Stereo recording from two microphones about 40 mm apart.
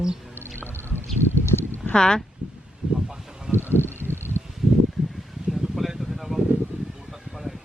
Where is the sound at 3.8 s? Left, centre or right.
Right.